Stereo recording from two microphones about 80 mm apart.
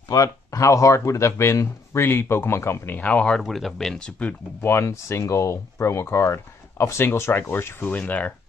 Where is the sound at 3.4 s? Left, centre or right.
Centre.